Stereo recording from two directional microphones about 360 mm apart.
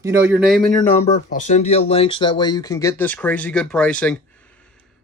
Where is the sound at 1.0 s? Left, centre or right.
Centre.